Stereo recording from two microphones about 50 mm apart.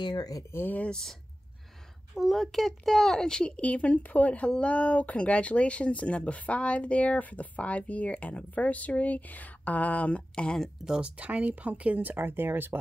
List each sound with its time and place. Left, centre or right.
2.1 s a woman's voice: centre
10.9 s speech: right